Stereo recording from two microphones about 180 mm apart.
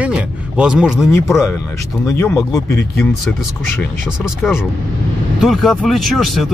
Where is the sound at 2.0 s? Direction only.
15° left (ahead or behind).